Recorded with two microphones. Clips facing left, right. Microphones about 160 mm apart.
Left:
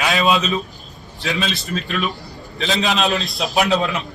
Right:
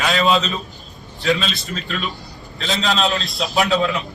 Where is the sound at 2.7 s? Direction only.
20° left (ahead or behind).